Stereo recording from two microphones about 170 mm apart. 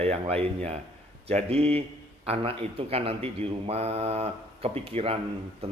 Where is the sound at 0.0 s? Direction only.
35° right (ahead or behind).